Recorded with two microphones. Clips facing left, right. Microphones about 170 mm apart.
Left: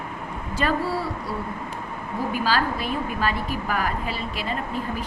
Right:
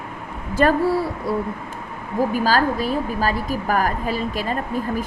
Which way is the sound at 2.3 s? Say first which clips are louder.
Right 3 dB; 45° right (ahead or behind).